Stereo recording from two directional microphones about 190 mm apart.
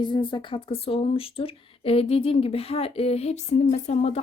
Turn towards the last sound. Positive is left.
turn(degrees=35)  # may be behind; listen again after turning